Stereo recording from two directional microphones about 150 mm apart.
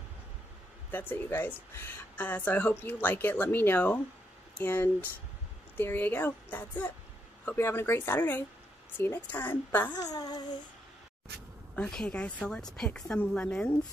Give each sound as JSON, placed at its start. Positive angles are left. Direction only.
{"t": 0.9, "sound": "speech", "side_deg": 15}
{"t": 9.9, "sound": "speech", "side_deg": 25}
{"t": 11.7, "sound": "speech", "side_deg": 5}